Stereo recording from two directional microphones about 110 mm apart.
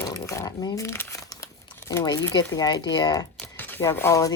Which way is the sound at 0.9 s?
25° left (ahead or behind).